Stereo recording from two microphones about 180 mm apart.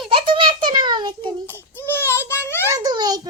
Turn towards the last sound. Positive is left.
turn(degrees=-20)  # may be behind; listen again after turning